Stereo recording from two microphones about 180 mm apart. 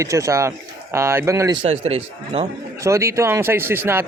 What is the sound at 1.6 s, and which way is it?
Speech, 35° right (ahead or behind).